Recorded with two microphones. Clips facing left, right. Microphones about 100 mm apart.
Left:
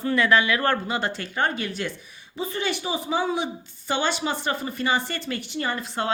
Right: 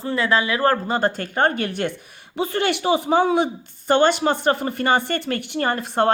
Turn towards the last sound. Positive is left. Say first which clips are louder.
# right 7 dB
turn(degrees=-55)  # may be behind; listen again after turning